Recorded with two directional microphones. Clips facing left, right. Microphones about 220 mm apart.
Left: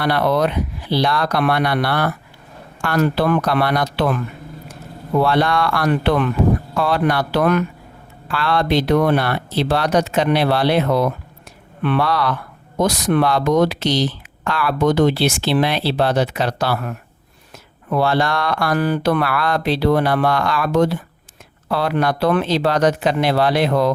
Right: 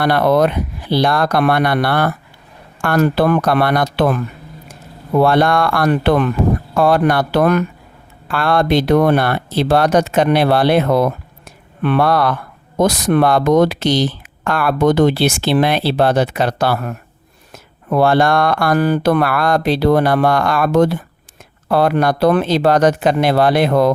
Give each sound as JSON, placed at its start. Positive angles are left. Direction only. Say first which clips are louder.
{"t": 0.0, "sound": "speech", "louder": "right 4 dB", "side_deg": -50}
{"t": 5.2, "sound": "speech", "louder": "right 4 dB", "side_deg": -50}